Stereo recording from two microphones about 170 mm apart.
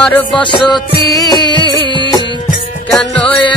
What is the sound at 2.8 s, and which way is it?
Music, 5° left (ahead or behind).